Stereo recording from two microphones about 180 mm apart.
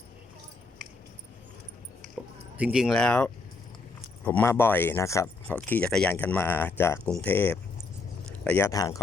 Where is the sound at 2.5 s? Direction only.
5° right (ahead or behind).